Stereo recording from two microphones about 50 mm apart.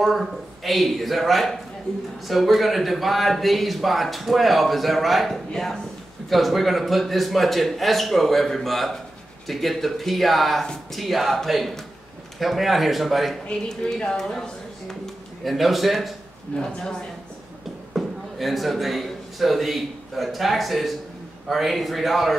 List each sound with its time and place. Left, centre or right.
0.0 s a man's voice: centre
13.7 s speech: centre
15.4 s a man's voice: centre
16.7 s speech: centre
17.9 s a man's voice: centre